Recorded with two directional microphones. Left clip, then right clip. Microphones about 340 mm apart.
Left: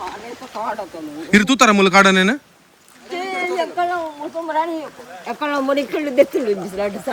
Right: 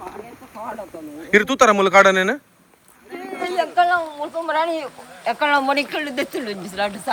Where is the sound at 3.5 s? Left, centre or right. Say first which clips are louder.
Right 5 dB; centre.